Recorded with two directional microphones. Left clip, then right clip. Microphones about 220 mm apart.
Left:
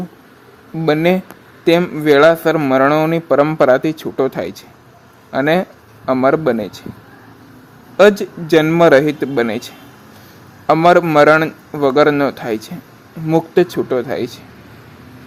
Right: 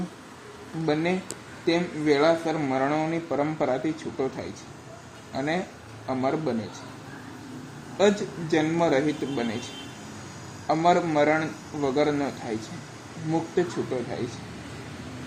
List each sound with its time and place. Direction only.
1.6 s speech: 45° left (ahead or behind)
7.9 s speech: 45° left (ahead or behind)
10.7 s speech: 45° left (ahead or behind)